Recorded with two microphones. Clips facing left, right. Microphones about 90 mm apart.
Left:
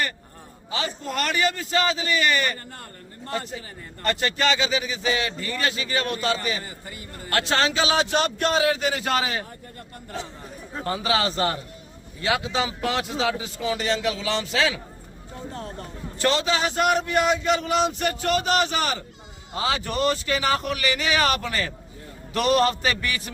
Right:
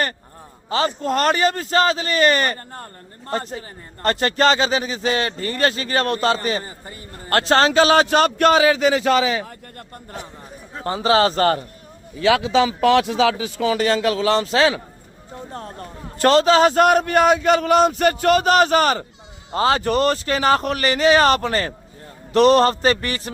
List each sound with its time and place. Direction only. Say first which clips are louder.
0.7 s speech: right 9 dB; 40° right (ahead or behind)
8.1 s speech: right 7 dB; 60° right (ahead or behind); by 8.8 s 90° right
10.8 s speech: right 7 dB; 35° right (ahead or behind); by 11.6 s 55° right (ahead or behind)
12.2 s speech: right 8 dB; 90° right; by 23.3 s 35° right (ahead or behind)